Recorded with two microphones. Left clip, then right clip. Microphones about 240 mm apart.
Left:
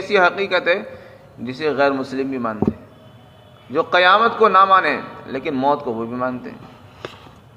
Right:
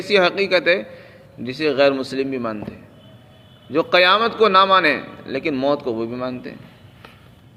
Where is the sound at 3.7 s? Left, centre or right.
Right.